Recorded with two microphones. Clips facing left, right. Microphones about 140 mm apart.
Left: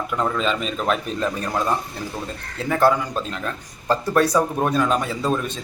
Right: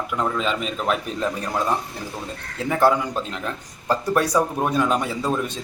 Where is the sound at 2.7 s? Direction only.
15° right (ahead or behind).